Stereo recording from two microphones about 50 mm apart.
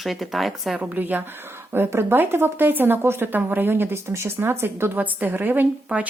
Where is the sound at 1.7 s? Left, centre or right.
Right.